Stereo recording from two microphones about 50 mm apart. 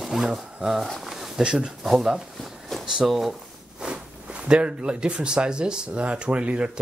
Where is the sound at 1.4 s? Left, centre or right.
Centre.